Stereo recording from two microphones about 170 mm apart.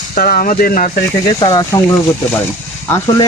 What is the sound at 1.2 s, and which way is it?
Speech, 25° left (ahead or behind).